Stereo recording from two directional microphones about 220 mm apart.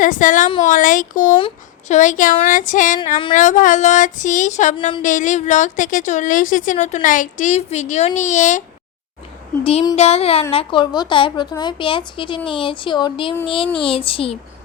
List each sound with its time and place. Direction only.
0.0 s a woman's voice: 35° left (ahead or behind)
9.6 s speech: 25° left (ahead or behind)